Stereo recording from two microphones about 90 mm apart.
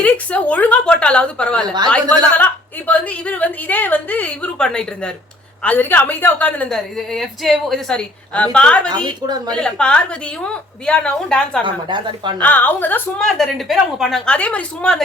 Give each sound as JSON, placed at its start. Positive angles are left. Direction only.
{"t": 0.0, "sound": "a woman's voice", "side_deg": 15}
{"t": 5.6, "sound": "a woman's voice", "side_deg": 20}
{"t": 6.7, "sound": "a woman's voice", "side_deg": 5}
{"t": 9.0, "sound": "a woman's voice", "side_deg": -50}
{"t": 9.5, "sound": "a woman's voice", "side_deg": 10}
{"t": 11.6, "sound": "speech", "side_deg": -60}
{"t": 12.4, "sound": "a woman's voice", "side_deg": 20}
{"t": 13.1, "sound": "a woman's voice", "side_deg": 5}
{"t": 14.3, "sound": "a woman's voice", "side_deg": 15}